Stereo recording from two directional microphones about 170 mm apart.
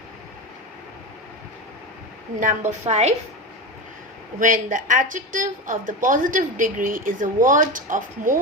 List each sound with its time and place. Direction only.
2.4 s a woman's voice: 45° right (ahead or behind)
4.4 s a woman's voice: 50° right (ahead or behind)